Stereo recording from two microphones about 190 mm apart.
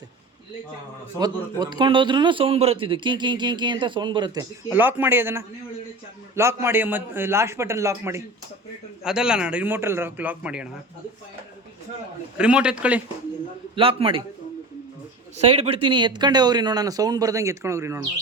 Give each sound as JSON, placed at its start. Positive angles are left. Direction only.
{"t": 1.2, "sound": "a man's voice", "side_deg": -20}
{"t": 4.7, "sound": "a man's voice", "side_deg": -10}
{"t": 9.0, "sound": "a man's voice", "side_deg": -5}
{"t": 12.4, "sound": "a man's voice", "side_deg": -5}
{"t": 13.7, "sound": "a man's voice", "side_deg": -30}
{"t": 15.4, "sound": "a man's voice", "side_deg": -30}